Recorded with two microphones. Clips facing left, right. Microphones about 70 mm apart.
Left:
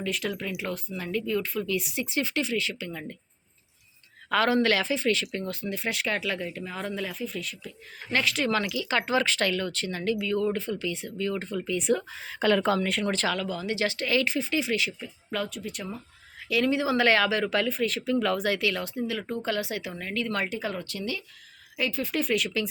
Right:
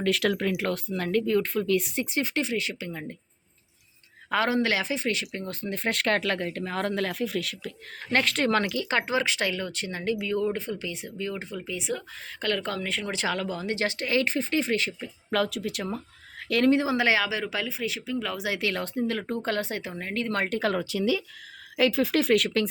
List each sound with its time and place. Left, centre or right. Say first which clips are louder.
0.0 s speech: right 6 dB; right
4.3 s speech: left 2 dB; centre
5.7 s speech: right 5 dB; right
8.1 s speech: right 2 dB; right
8.6 s speech: right 1 dB; right; by 12.0 s centre
12.2 s speech: left 5 dB; centre
13.3 s speech: even; right
15.0 s speech: right 5 dB; right
16.5 s speech: right 3 dB; right
16.8 s speech: left 1 dB; right
17.1 s speech: left 2 dB; centre
18.6 s speech: right 1 dB; right
20.5 s speech: right 6 dB; right
21.8 s speech: right 6 dB; right